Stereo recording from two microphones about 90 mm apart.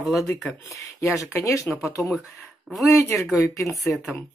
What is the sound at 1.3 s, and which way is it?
Speech, 35° left (ahead or behind).